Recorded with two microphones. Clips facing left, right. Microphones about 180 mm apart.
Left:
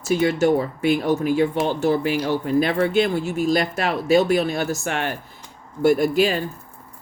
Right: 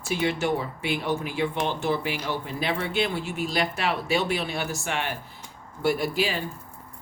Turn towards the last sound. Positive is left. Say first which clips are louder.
# left 8 dB
turn(degrees=50)  # may be behind; listen again after turning